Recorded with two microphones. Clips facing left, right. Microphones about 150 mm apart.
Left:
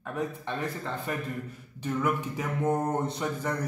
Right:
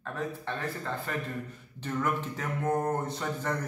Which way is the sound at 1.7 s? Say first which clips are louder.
Left 2 dB; 10° left (ahead or behind).